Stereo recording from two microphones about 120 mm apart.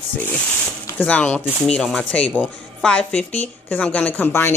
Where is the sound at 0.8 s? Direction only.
15° left (ahead or behind).